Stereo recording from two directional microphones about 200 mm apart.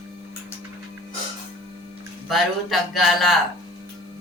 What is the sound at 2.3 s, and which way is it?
Speech, centre (ahead or behind).